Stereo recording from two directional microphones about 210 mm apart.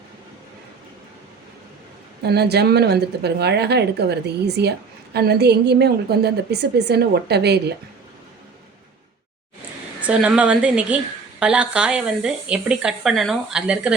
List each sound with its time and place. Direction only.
2.2 s a woman's voice: 50° right (ahead or behind)
10.0 s a woman's voice: 5° right (ahead or behind)